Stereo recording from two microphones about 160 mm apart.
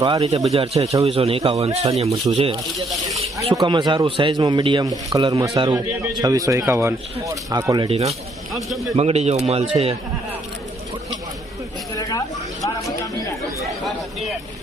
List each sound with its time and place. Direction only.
0.0 s a man's voice: 25° right (ahead or behind)
0.5 s a man's voice: 40° right (ahead or behind)
7.9 s speech: 40° right (ahead or behind)
8.5 s speech: centre (ahead or behind)
9.0 s speech: 40° right (ahead or behind)
11.9 s vehicle: 20° left (ahead or behind)
13.8 s a sound: centre (ahead or behind)